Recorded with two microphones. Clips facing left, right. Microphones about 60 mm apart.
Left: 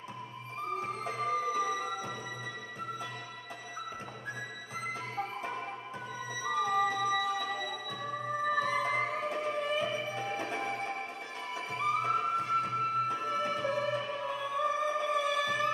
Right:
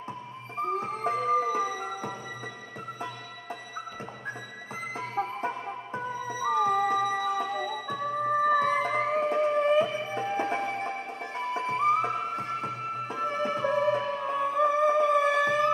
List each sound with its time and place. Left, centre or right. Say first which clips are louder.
0.7 s music: right 5 dB; right
4.9 s music: right 9 dB; right